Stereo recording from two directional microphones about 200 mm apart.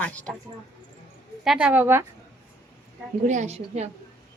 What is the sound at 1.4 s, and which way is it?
Speech, 5° right (ahead or behind).